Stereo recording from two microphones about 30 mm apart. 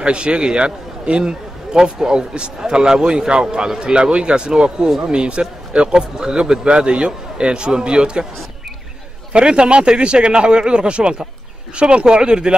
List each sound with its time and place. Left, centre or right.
0.0 s a man's voice: right
9.3 s speech: right